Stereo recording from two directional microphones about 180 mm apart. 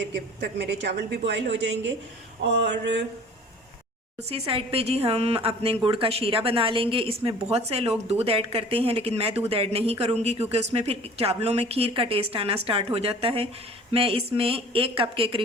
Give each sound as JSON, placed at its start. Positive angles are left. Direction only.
{"t": 0.1, "sound": "a woman's voice", "side_deg": -70}
{"t": 4.2, "sound": "speech", "side_deg": -35}